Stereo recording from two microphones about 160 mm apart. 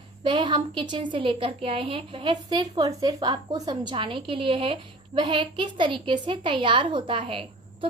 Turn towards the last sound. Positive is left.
turn(degrees=-35)  # may be behind; listen again after turning